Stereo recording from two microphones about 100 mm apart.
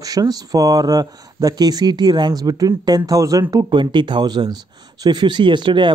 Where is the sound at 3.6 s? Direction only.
50° right (ahead or behind).